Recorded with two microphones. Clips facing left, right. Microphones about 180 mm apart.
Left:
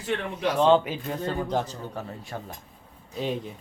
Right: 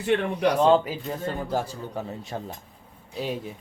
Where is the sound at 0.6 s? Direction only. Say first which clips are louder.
Left 2 dB; 5° right (ahead or behind).